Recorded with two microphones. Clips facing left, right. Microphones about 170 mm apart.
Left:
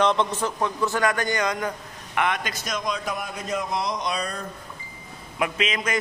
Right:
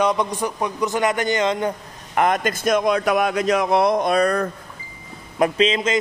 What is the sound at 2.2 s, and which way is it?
A man's voice, 45° right (ahead or behind).